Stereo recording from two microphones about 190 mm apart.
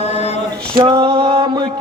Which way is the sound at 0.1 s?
35° left (ahead or behind).